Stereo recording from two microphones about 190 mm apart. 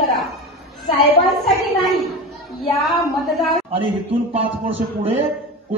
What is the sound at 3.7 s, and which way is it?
A man's voice, 30° right (ahead or behind).